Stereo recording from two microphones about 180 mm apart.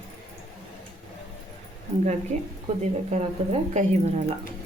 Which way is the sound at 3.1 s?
40° right (ahead or behind).